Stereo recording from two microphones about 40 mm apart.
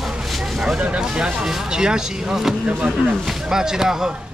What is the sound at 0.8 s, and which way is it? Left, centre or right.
Speech, right.